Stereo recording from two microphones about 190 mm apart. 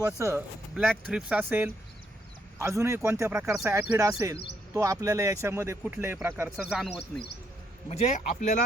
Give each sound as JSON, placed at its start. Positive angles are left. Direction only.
{"t": 0.0, "sound": "speech", "side_deg": -15}
{"t": 7.9, "sound": "speech", "side_deg": 35}